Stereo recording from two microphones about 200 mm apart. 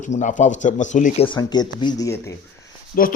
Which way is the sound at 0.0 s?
40° left (ahead or behind).